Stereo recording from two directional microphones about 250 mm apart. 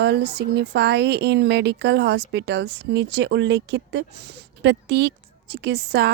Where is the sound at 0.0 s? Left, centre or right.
Right.